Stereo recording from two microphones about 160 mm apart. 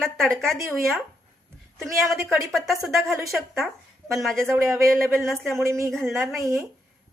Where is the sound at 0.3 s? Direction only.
Centre (ahead or behind).